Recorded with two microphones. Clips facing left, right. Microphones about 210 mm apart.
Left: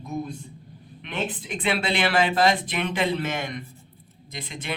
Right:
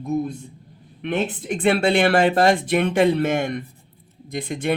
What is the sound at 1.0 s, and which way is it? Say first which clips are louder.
Speech: right 7 dB; 50° right (ahead or behind).